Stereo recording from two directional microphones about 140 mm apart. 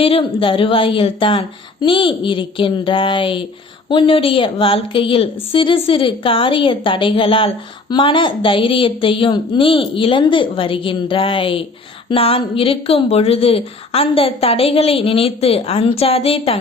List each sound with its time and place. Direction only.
0.0 s a woman's voice: 40° left (ahead or behind)